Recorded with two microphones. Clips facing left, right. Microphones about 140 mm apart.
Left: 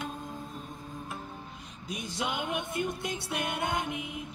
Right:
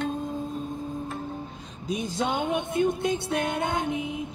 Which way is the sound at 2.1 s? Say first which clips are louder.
Right 5 dB; 35° right (ahead or behind).